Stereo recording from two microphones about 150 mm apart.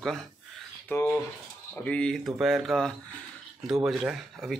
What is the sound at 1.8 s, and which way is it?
A man's voice, 5° left (ahead or behind).